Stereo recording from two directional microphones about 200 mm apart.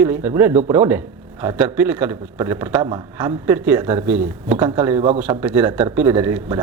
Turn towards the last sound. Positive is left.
turn(degrees=-10)  # may be behind; listen again after turning